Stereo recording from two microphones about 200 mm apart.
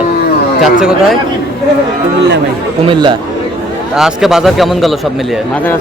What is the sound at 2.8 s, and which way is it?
Speech, 25° right (ahead or behind).